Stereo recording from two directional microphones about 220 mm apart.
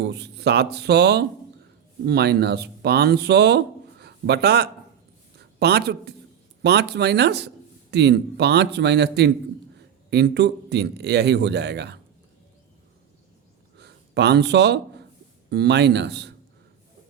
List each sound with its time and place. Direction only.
0.0 s a woman's voice: 50° right (ahead or behind)
13.7 s a sound: 50° right (ahead or behind)
15.4 s speech: 50° right (ahead or behind)